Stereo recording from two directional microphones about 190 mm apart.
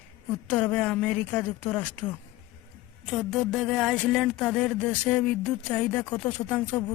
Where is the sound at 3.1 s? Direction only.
Centre (ahead or behind).